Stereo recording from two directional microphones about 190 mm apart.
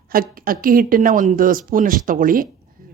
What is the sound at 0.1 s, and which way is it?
Speech, 50° right (ahead or behind).